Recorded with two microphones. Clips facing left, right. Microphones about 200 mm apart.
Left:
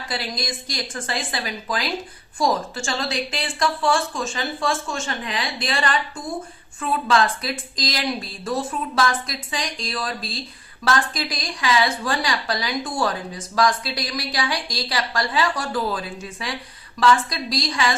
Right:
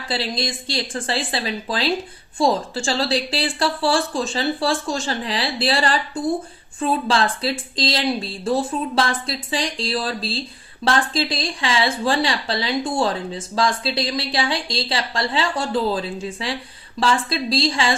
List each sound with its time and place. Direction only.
0.1 s a woman's voice: 30° right (ahead or behind)